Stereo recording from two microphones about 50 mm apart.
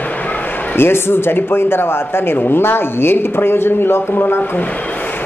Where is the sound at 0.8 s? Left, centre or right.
Left.